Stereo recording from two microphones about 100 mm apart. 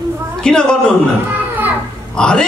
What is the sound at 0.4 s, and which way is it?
Speech, 10° left (ahead or behind).